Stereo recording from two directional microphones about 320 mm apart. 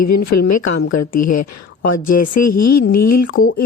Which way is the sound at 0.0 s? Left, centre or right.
Left.